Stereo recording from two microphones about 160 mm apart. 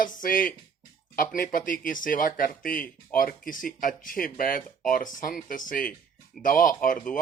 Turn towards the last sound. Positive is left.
turn(degrees=60)  # may be behind; listen again after turning